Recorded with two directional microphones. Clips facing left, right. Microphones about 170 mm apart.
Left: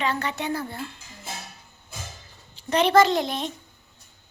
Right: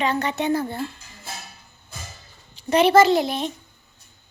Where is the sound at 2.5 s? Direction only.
10° right (ahead or behind).